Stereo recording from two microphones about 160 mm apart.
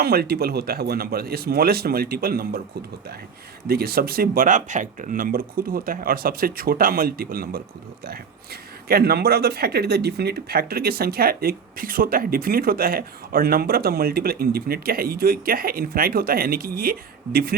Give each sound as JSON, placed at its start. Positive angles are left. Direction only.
{"t": 0.0, "sound": "speech", "side_deg": -75}
{"t": 3.7, "sound": "speech", "side_deg": -70}
{"t": 8.9, "sound": "speech", "side_deg": -75}